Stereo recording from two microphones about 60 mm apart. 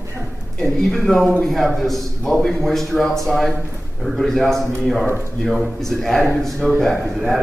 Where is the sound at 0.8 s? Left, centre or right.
Centre.